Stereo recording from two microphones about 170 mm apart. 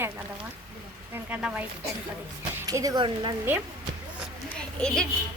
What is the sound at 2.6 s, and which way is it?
Speech, 20° right (ahead or behind).